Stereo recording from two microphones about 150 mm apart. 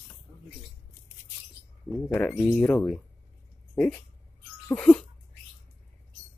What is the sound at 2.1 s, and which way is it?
Speech, 5° left (ahead or behind).